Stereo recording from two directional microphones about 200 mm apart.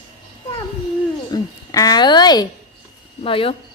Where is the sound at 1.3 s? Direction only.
20° left (ahead or behind).